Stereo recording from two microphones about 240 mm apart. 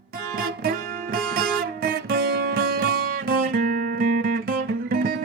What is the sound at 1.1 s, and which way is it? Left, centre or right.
Music, right.